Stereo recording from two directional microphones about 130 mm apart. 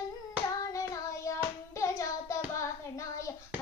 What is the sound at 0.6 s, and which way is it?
Child singing, 25° left (ahead or behind).